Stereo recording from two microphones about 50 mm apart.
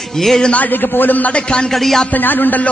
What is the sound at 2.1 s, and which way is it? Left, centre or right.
Speech, left.